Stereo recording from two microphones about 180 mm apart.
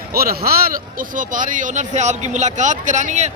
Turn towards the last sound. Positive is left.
turn(degrees=-40)  # may be behind; listen again after turning